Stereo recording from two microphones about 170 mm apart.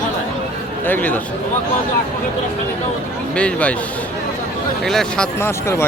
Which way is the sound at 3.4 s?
5° left (ahead or behind).